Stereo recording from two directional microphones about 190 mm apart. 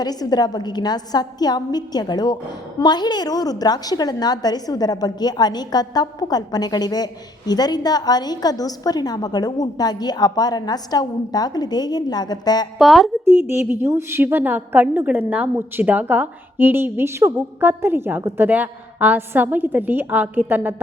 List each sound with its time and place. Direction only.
0.0 s a woman's voice: 20° left (ahead or behind)
12.8 s speech: centre (ahead or behind)
13.5 s a woman's voice: 10° right (ahead or behind)